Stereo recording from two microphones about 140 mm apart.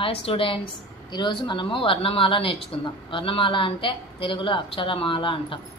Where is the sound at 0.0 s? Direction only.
40° left (ahead or behind).